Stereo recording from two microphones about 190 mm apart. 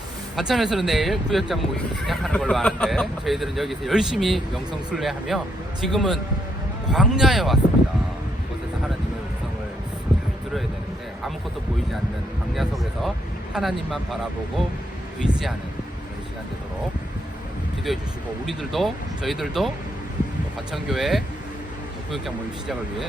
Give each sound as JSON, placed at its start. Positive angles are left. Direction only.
{"t": 0.3, "sound": "speech", "side_deg": 0}
{"t": 12.5, "sound": "speech", "side_deg": 0}
{"t": 15.2, "sound": "speech", "side_deg": 0}
{"t": 17.9, "sound": "speech", "side_deg": 0}
{"t": 20.8, "sound": "speech", "side_deg": 0}